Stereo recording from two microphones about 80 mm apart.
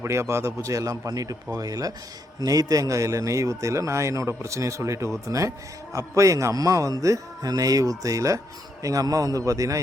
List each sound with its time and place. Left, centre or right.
0.0 s a man's voice: right